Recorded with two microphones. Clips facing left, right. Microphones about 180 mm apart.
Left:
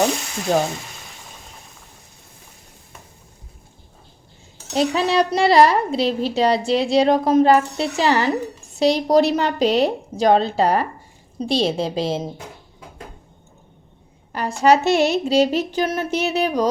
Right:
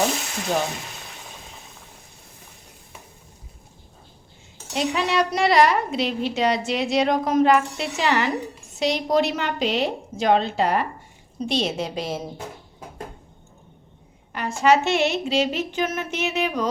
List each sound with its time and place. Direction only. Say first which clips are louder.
4.7 s a woman's voice: left 4 dB; 35° left (ahead or behind)
14.3 s a woman's voice: left 3 dB; 35° left (ahead or behind)